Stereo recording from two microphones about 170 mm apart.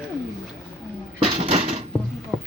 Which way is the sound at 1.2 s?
30° right (ahead or behind).